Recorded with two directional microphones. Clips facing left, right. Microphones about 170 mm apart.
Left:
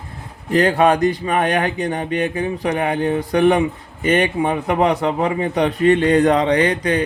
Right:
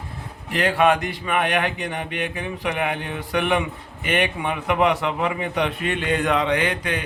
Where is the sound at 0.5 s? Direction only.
40° left (ahead or behind).